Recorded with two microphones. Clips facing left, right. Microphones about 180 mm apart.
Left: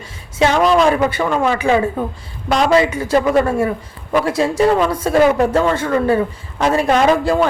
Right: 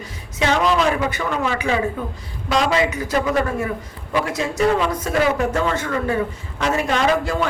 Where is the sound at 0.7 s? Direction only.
55° left (ahead or behind).